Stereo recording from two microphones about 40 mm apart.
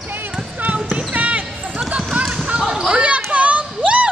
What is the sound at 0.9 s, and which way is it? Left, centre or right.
Basketball bounce, right.